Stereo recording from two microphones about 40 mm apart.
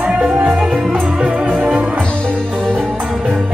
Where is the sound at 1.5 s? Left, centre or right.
Right.